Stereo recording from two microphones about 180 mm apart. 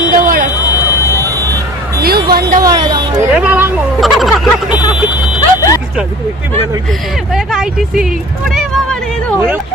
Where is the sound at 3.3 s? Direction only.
5° right (ahead or behind).